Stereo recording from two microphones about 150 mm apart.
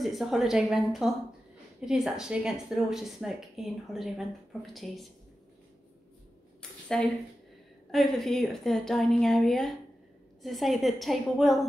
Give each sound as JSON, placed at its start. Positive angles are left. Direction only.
{"t": 0.0, "sound": "a woman's voice", "side_deg": 0}
{"t": 6.9, "sound": "a woman's voice", "side_deg": 5}